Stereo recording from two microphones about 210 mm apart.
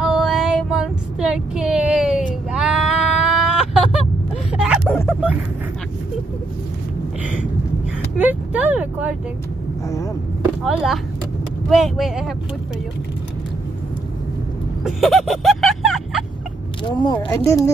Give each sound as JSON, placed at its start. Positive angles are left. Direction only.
{"t": 0.0, "sound": "female singing", "side_deg": 0}
{"t": 2.5, "sound": "bleat", "side_deg": -5}
{"t": 4.6, "sound": "a sound", "side_deg": -5}
{"t": 8.2, "sound": "speech", "side_deg": -5}
{"t": 10.6, "sound": "speech", "side_deg": 0}
{"t": 14.8, "sound": "vehicle", "side_deg": 0}
{"t": 16.8, "sound": "speech", "side_deg": 20}